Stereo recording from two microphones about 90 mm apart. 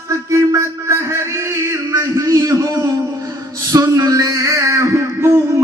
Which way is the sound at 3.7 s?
35° right (ahead or behind).